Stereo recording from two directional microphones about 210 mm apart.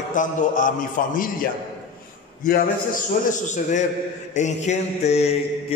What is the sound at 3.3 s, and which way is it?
Mantra, 35° left (ahead or behind).